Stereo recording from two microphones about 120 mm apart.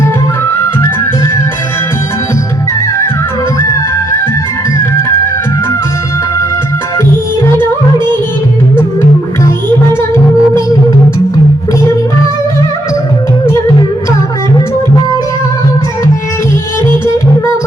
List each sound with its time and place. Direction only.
10.0 s music: 20° left (ahead or behind)